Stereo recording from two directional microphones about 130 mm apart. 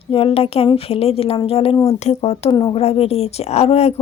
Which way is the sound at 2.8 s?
50° left (ahead or behind).